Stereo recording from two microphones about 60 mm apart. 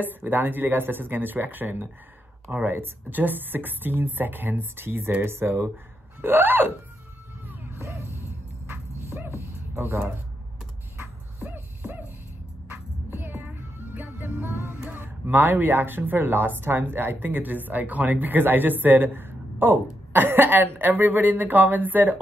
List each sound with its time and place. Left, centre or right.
0.0 s speech: right
7.8 s music: right
8.6 s dog: right
11.0 s dog: right
12.6 s child singing: right
13.9 s music: right
15.0 s speech: right